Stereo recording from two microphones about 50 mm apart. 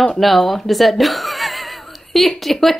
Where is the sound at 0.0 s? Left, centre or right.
Centre.